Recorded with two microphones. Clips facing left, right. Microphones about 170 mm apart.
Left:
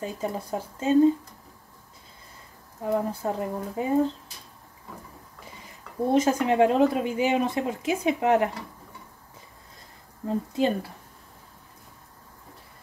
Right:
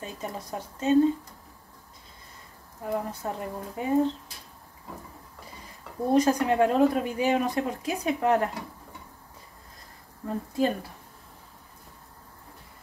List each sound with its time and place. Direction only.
0.0 s speech: 25° left (ahead or behind)
2.8 s speech: 30° left (ahead or behind)
6.1 s speech: 25° left (ahead or behind)
10.2 s speech: 20° left (ahead or behind)